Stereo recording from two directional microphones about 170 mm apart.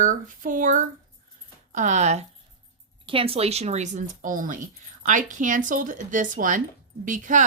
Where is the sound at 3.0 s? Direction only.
30° right (ahead or behind); by 7.4 s 50° right (ahead or behind).